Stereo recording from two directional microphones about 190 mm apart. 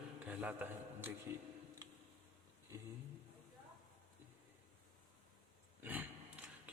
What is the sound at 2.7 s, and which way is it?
Speech, 15° right (ahead or behind).